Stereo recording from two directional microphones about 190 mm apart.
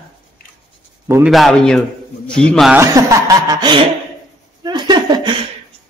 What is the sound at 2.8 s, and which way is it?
Speech, 15° right (ahead or behind).